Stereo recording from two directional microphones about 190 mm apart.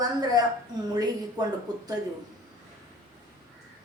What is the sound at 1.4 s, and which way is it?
Speech, 20° right (ahead or behind).